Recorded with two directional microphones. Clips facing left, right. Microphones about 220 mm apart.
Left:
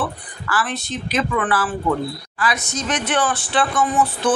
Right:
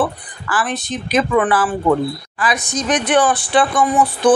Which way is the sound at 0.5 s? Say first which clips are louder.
Right 3 dB; 15° right (ahead or behind).